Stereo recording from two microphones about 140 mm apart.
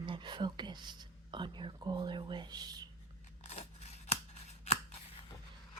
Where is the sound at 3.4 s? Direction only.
50° left (ahead or behind).